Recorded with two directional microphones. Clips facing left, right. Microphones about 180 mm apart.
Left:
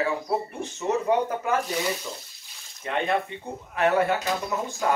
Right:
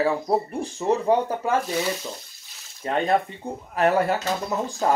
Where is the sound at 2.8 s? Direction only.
35° right (ahead or behind).